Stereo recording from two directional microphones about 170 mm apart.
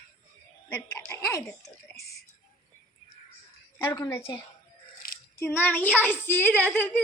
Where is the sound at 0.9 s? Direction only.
15° left (ahead or behind).